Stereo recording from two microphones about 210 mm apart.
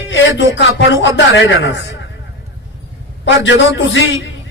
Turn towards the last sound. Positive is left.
turn(degrees=60)  # may be behind; listen again after turning